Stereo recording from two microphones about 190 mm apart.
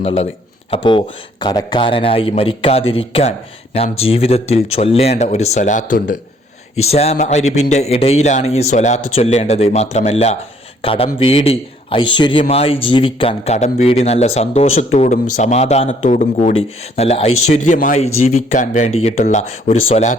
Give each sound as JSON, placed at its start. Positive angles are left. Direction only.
{"t": 0.0, "sound": "a man's voice", "side_deg": 30}